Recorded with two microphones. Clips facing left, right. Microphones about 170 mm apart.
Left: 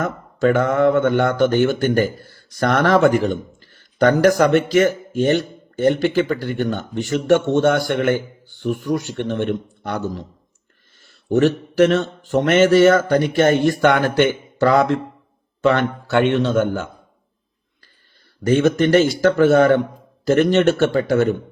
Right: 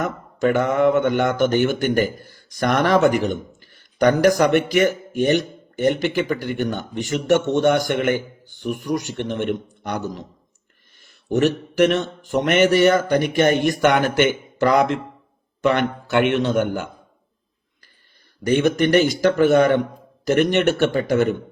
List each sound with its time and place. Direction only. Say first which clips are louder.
0.0 s speech: left 2 dB; 15° right (ahead or behind)
18.4 s speech: left 2 dB; 15° right (ahead or behind)